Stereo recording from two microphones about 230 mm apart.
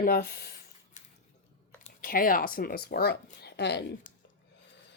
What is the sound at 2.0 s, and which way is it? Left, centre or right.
Speech, left.